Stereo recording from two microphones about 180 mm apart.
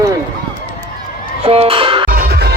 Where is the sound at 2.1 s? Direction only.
60° right (ahead or behind).